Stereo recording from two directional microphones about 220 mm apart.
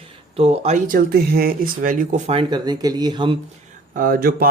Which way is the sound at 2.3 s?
20° right (ahead or behind).